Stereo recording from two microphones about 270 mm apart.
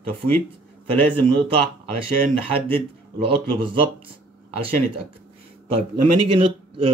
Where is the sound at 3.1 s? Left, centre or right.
Centre.